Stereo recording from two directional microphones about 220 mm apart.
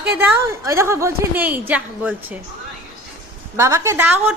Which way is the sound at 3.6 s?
15° right (ahead or behind).